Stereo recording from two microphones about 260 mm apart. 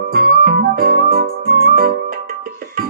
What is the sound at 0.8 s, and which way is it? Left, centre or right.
Music, right.